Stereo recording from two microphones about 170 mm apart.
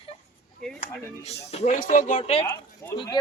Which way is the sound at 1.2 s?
40° left (ahead or behind).